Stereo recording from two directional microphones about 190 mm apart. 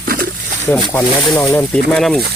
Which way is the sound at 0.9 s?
10° left (ahead or behind).